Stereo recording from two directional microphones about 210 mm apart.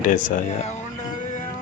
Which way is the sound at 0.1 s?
35° left (ahead or behind).